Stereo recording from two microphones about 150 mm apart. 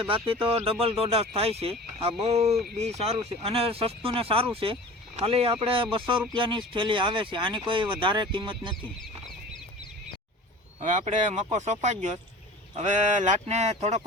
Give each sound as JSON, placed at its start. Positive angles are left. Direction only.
{"t": 0.0, "sound": "speech", "side_deg": -35}
{"t": 10.8, "sound": "speech", "side_deg": -55}